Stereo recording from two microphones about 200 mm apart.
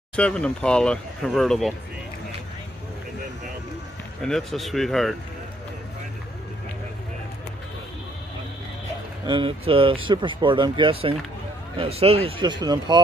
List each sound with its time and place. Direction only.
0.1 s speech: 5° left (ahead or behind)
4.2 s speech: centre (ahead or behind)
9.2 s speech: 25° right (ahead or behind)